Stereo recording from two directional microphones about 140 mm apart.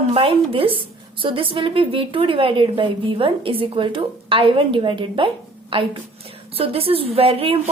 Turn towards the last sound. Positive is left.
turn(degrees=-40)  # may be behind; listen again after turning